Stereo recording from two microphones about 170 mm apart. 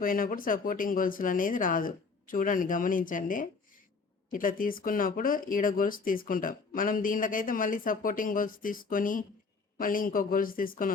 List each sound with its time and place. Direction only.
0.0 s speech: 55° left (ahead or behind)